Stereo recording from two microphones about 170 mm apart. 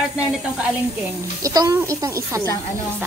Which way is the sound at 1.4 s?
20° right (ahead or behind).